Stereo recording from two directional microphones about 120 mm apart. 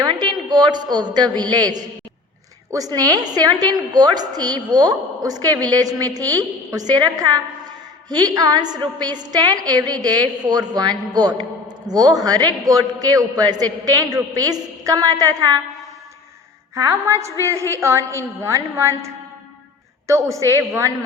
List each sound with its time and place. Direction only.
0.0 s a woman's voice: 35° right (ahead or behind)
16.7 s a woman's voice: 25° right (ahead or behind)